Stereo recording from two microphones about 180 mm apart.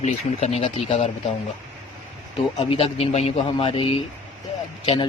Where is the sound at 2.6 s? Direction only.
30° left (ahead or behind).